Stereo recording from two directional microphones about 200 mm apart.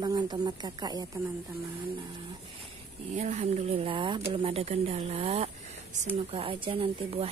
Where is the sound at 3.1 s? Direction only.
35° right (ahead or behind).